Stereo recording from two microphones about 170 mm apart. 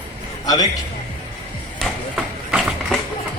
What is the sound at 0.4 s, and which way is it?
Speech, 20° left (ahead or behind).